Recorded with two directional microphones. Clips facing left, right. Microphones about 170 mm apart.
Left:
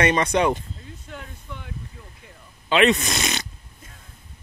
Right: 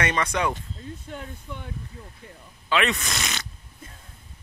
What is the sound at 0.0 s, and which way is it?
Speech, 20° left (ahead or behind).